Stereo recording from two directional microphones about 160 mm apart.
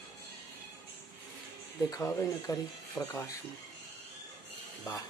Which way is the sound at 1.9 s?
15° left (ahead or behind).